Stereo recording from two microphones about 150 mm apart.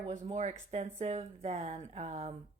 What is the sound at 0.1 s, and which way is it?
Speech, 50° right (ahead or behind).